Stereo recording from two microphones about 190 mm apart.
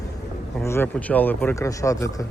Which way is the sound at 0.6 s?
10° left (ahead or behind).